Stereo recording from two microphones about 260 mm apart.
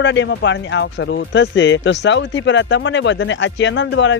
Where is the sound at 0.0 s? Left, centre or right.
Left.